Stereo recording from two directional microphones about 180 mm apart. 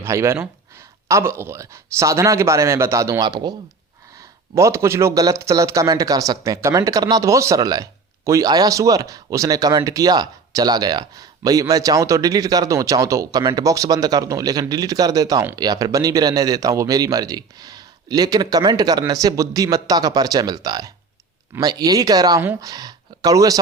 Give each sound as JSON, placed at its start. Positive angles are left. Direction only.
{"t": 0.0, "sound": "a man's voice", "side_deg": -15}
{"t": 4.5, "sound": "speech", "side_deg": -15}